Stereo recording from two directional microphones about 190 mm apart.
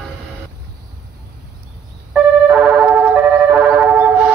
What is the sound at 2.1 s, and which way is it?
Music, centre (ahead or behind).